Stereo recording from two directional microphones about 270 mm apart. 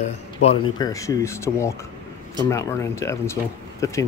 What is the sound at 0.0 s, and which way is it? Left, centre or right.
Speech, left.